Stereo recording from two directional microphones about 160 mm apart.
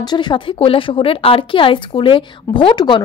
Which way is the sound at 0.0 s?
25° left (ahead or behind).